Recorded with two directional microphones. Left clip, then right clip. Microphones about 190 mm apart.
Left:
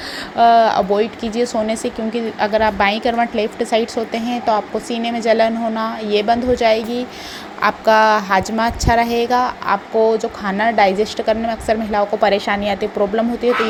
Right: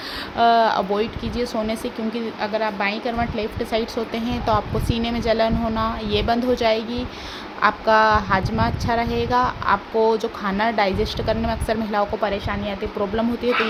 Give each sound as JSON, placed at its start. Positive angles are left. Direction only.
{"t": 0.3, "sound": "speech", "side_deg": 10}
{"t": 12.2, "sound": "a woman's voice", "side_deg": 25}
{"t": 13.4, "sound": "speech", "side_deg": 10}